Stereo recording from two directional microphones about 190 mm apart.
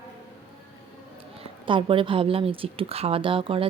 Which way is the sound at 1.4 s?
25° right (ahead or behind).